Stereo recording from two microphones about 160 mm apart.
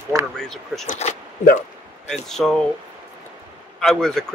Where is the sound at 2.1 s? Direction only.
Centre (ahead or behind).